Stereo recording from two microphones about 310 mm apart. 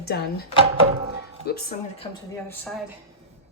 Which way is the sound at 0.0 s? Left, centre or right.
Left.